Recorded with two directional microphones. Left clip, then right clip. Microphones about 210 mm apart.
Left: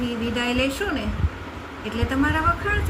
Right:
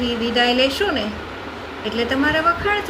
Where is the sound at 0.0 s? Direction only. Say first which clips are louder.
Right 7 dB; 15° left (ahead or behind).